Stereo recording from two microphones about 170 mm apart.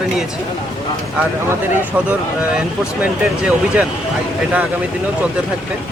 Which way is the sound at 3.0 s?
5° right (ahead or behind).